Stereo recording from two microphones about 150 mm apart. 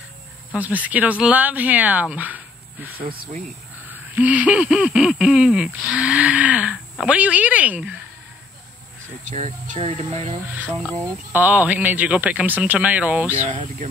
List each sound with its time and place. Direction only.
0.6 s speech: 10° right (ahead or behind)
3.9 s a sound: 10° right (ahead or behind)
7.1 s speech: 10° right (ahead or behind)
9.3 s speech: 45° right (ahead or behind)
10.5 s speech: 10° right (ahead or behind)